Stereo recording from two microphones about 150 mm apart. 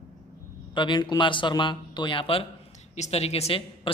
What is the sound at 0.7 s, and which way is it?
Speech, 30° left (ahead or behind).